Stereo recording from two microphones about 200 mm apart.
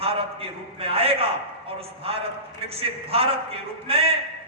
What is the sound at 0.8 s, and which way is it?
Speech, 30° right (ahead or behind).